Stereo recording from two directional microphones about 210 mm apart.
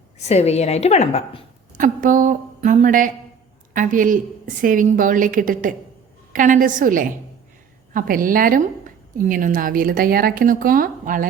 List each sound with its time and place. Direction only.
0.2 s a woman's voice: 30° left (ahead or behind)
1.8 s a woman's voice: 40° right (ahead or behind)